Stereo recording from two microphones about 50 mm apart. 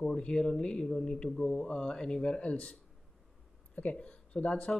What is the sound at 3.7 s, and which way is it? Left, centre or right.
Speech, left.